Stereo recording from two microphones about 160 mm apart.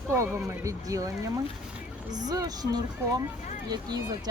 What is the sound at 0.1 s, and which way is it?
Speech, 15° right (ahead or behind).